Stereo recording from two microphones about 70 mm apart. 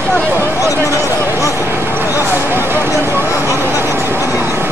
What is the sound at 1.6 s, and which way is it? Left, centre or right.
Vehicle, right.